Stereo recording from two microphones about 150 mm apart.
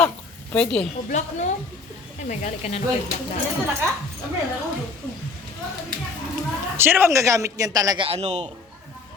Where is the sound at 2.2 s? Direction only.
50° left (ahead or behind).